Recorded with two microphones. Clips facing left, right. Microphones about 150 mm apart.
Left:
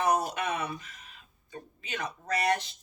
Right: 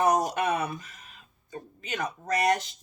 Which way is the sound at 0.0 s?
40° right (ahead or behind).